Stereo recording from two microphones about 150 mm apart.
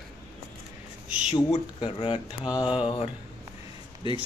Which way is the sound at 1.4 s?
30° left (ahead or behind).